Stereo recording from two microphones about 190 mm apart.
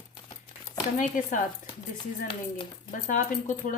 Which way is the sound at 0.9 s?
40° left (ahead or behind).